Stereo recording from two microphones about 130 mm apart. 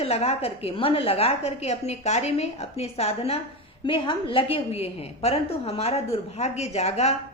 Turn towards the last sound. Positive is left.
turn(degrees=55)  # may be behind; listen again after turning